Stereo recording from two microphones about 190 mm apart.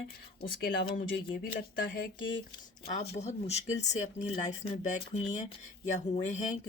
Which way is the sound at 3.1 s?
35° left (ahead or behind).